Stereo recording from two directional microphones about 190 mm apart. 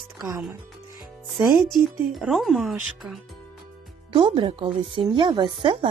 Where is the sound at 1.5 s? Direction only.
Centre (ahead or behind).